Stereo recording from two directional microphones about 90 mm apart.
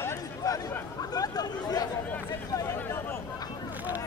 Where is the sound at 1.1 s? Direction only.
45° left (ahead or behind).